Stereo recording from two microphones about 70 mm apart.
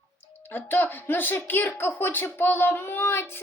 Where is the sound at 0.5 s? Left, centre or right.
Left.